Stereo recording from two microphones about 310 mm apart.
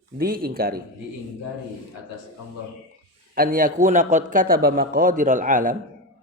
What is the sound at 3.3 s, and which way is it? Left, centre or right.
A man's voice, right.